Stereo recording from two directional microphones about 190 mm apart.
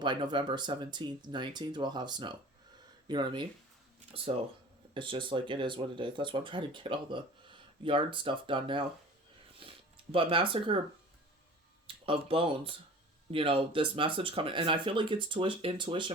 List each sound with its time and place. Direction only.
0.0 s speech: 25° right (ahead or behind)
4.9 s speech: 25° right (ahead or behind)
11.9 s speech: 30° right (ahead or behind)